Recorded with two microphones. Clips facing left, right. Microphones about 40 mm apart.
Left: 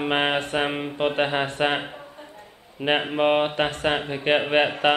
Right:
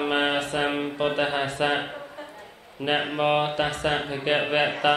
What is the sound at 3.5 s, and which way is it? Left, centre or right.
Mantra, left.